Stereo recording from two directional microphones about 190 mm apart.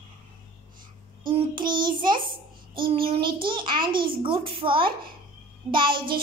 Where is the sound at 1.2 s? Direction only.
25° right (ahead or behind).